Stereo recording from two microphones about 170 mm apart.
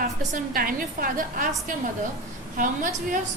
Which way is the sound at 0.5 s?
55° right (ahead or behind).